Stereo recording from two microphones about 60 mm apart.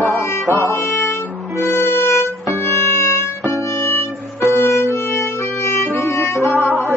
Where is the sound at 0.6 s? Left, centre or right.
Left.